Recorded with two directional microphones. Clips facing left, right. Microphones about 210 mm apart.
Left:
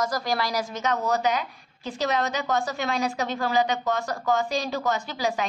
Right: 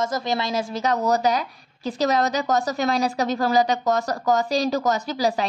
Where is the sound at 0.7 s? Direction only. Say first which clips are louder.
Right 5 dB; 35° right (ahead or behind).